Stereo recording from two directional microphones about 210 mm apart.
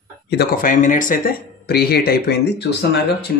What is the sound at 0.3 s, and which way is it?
Speech, 45° left (ahead or behind).